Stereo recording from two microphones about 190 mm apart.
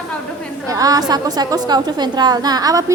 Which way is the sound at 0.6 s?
20° right (ahead or behind).